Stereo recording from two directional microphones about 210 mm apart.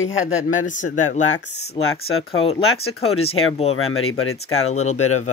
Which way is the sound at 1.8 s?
80° left.